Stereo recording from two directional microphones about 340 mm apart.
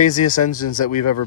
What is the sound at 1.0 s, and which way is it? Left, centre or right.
Speech, left.